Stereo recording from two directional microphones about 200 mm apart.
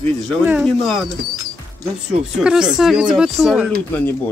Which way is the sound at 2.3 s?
5° right (ahead or behind).